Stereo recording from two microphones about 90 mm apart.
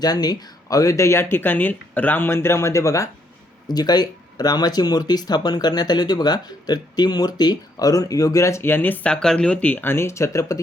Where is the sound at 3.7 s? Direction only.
50° left (ahead or behind).